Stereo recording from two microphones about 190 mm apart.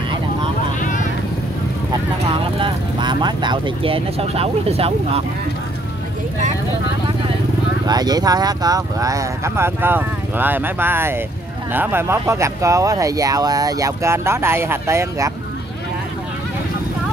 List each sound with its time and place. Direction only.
0.7 s vehicle: 40° left (ahead or behind)
2.2 s speech: 30° right (ahead or behind)
7.8 s speech: 20° right (ahead or behind)